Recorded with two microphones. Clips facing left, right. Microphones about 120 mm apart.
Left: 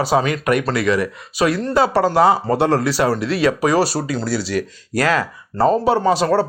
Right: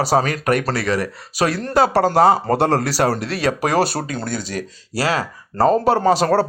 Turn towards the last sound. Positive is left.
turn(degrees=-40)  # may be behind; listen again after turning